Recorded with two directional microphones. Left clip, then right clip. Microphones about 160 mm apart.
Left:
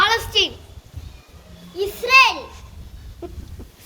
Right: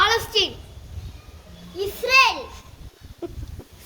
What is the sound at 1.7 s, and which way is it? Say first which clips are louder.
Children playing: left 3 dB; 10° right (ahead or behind).